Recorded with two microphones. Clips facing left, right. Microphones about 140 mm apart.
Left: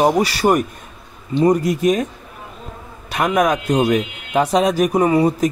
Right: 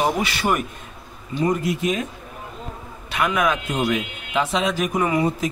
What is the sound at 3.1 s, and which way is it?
Speech, 40° left (ahead or behind).